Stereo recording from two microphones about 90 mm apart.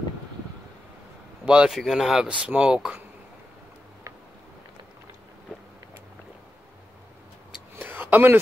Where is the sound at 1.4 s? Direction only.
10° right (ahead or behind).